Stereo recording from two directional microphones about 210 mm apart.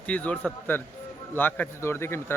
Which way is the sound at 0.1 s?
5° left (ahead or behind).